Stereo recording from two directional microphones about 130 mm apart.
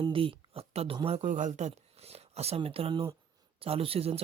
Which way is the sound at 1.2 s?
70° right (ahead or behind).